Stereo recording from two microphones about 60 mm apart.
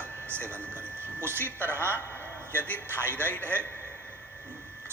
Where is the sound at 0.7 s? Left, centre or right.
Right.